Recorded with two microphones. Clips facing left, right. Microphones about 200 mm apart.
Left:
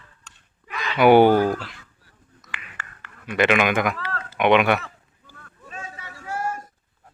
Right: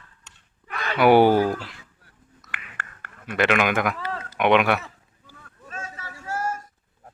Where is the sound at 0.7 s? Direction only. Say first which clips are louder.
Right 1 dB; 55° right (ahead or behind).